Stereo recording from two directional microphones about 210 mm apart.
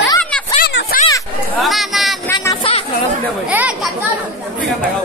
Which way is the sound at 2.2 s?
15° left (ahead or behind).